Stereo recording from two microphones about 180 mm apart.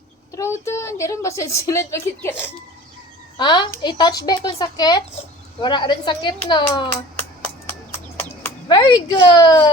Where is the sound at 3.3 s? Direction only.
25° left (ahead or behind).